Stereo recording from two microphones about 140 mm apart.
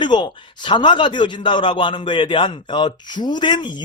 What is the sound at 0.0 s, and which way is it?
A man's voice, 35° left (ahead or behind).